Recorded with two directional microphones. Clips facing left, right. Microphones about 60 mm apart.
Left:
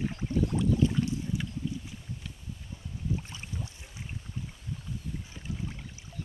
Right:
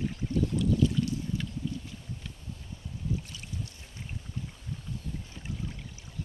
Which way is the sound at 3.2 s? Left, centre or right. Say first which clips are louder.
Left 1 dB; left.